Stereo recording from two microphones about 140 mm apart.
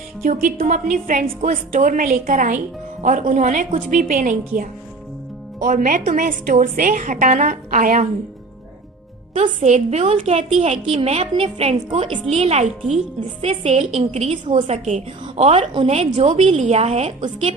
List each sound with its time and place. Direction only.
0.2 s a woman's voice: 80° right
3.0 s a woman's voice: 65° right (ahead or behind)
9.3 s a woman's voice: 55° right (ahead or behind)
14.5 s a woman's voice: 60° right (ahead or behind)